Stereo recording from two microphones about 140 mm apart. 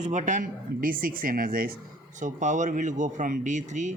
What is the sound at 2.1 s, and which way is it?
Speech, 60° right (ahead or behind).